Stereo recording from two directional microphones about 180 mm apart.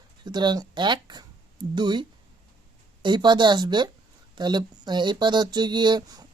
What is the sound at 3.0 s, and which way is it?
Speech, 25° right (ahead or behind).